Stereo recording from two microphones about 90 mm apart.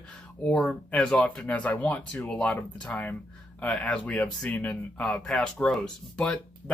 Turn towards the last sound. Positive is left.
turn(degrees=10)  # may be behind; listen again after turning